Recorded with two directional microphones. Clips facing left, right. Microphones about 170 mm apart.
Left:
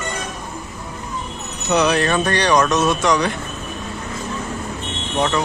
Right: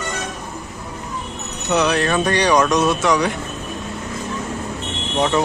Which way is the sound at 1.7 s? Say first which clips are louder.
Left 1 dB; centre (ahead or behind).